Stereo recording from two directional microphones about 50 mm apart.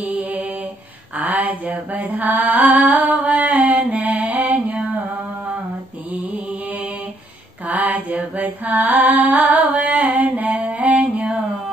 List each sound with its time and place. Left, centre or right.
0.0 s mantra: right
1.1 s a sound: right
4.9 s music: right
7.6 s mantra: right
10.8 s music: right